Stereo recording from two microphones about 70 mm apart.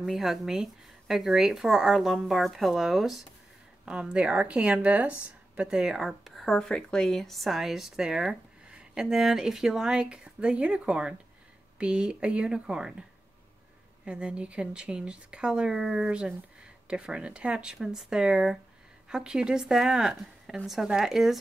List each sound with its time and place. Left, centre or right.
0.0 s speech: centre
3.8 s speech: centre
14.0 s speech: centre